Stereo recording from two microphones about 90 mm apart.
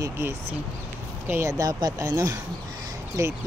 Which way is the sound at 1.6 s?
40° right (ahead or behind).